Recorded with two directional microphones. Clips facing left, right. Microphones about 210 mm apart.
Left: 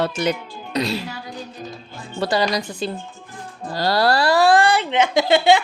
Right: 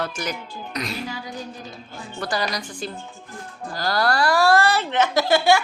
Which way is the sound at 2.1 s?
25° left (ahead or behind).